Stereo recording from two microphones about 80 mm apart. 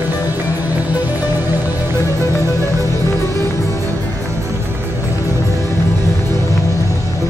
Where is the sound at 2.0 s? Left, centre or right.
Left.